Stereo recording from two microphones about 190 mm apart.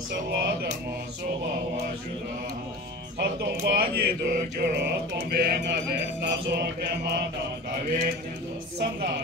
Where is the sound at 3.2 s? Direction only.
55° right (ahead or behind).